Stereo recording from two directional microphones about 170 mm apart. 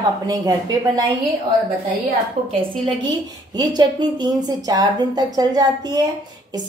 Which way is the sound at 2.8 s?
25° right (ahead or behind).